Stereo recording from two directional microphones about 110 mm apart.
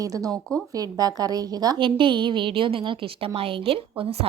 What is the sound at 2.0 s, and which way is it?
A woman's voice, 50° right (ahead or behind).